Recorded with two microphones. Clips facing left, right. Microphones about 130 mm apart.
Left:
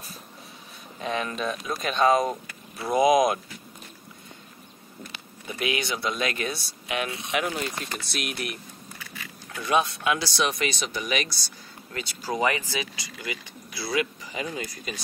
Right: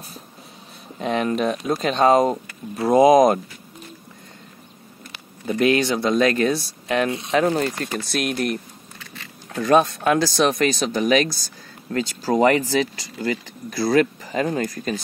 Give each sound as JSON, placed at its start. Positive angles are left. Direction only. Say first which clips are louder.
{"t": 0.9, "sound": "speech", "louder": "right 7 dB", "side_deg": -35}
{"t": 5.7, "sound": "speech", "louder": "right 8 dB", "side_deg": -40}
{"t": 7.1, "sound": "speech", "louder": "right 8 dB", "side_deg": -25}
{"t": 7.4, "sound": "speech", "louder": "right 9 dB", "side_deg": -45}
{"t": 9.6, "sound": "speech", "louder": "right 8 dB", "side_deg": -45}